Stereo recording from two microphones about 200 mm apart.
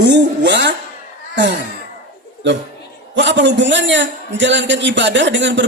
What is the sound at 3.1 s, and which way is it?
A man's voice, 65° right (ahead or behind).